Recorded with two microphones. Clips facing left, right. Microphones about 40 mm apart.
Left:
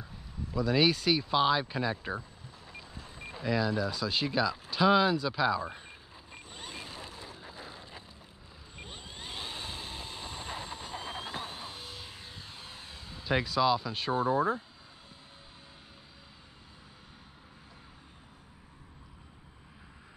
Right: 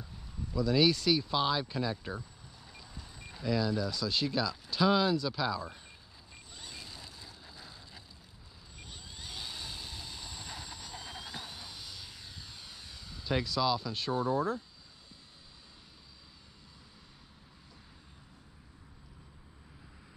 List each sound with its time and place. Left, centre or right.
0.6 s speech: left
2.7 s vehicle: left